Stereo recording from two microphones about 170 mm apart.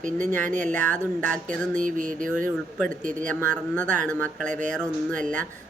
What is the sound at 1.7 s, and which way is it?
Speech, 50° right (ahead or behind).